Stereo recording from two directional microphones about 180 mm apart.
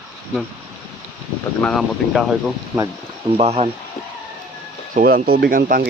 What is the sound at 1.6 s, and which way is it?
Speech, centre (ahead or behind).